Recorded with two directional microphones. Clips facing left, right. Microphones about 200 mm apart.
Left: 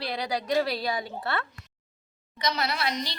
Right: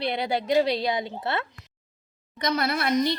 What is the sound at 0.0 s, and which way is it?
A woman's voice, 25° right (ahead or behind).